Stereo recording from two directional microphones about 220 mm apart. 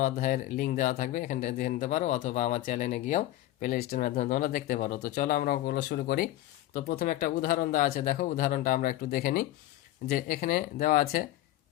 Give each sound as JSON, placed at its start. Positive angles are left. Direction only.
{"t": 0.0, "sound": "speech", "side_deg": 35}